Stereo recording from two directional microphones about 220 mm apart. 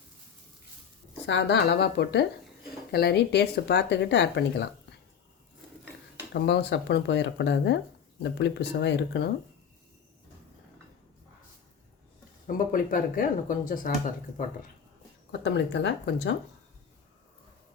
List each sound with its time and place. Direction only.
1.3 s speech: 55° left (ahead or behind)
6.3 s speech: 50° left (ahead or behind)
12.5 s speech: 40° left (ahead or behind)
15.3 s speech: 50° left (ahead or behind)